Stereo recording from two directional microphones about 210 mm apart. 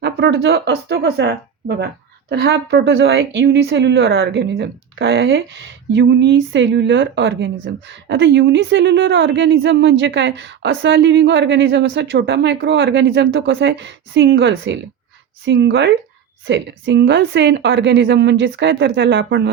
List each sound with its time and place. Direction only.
0.0 s a woman's voice: 50° right (ahead or behind)